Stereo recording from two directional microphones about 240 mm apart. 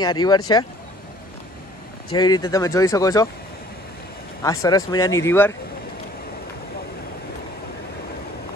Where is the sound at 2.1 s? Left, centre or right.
Centre.